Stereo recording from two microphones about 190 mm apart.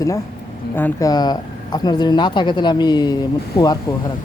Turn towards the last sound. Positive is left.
turn(degrees=20)  # may be behind; listen again after turning